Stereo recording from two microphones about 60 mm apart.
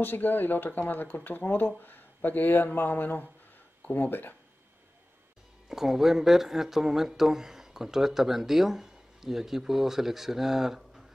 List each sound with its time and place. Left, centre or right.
0.0 s speech: left
5.7 s speech: centre